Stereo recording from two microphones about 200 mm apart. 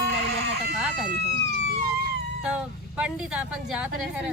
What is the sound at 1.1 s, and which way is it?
Police car, 55° right (ahead or behind).